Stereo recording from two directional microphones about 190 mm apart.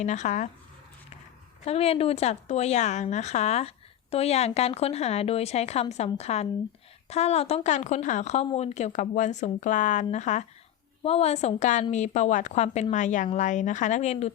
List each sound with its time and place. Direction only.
0.0 s speech: 40° left (ahead or behind)
1.6 s speech: 30° left (ahead or behind)